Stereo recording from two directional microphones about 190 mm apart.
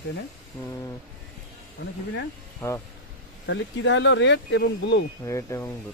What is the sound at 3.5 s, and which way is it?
Speech, 75° left (ahead or behind).